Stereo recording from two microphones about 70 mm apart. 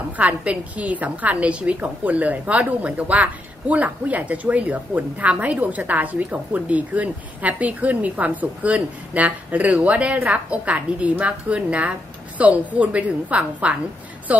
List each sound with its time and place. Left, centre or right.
0.2 s a woman's voice: centre